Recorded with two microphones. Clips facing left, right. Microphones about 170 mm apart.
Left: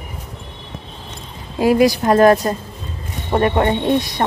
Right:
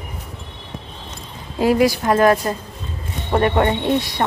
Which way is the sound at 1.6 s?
15° left (ahead or behind).